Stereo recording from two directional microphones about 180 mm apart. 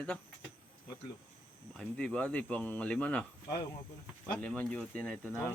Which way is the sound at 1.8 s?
5° left (ahead or behind).